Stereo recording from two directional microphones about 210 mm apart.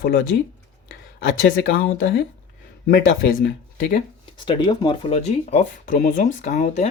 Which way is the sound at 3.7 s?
40° left (ahead or behind).